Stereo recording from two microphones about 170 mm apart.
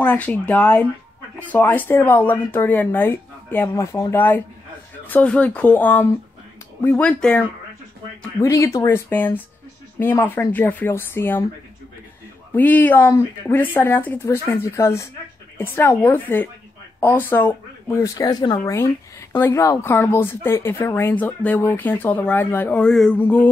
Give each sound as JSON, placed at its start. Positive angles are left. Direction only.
{"t": 0.0, "sound": "speech", "side_deg": 10}
{"t": 8.4, "sound": "speech", "side_deg": 15}
{"t": 12.5, "sound": "speech", "side_deg": 10}